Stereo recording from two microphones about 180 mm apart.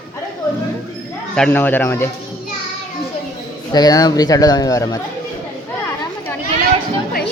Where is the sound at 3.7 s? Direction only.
20° left (ahead or behind).